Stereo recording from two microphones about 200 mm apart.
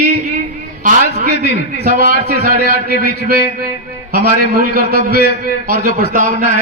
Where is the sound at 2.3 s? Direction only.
50° right (ahead or behind).